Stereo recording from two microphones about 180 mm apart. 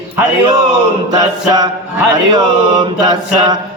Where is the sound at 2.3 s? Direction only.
25° right (ahead or behind).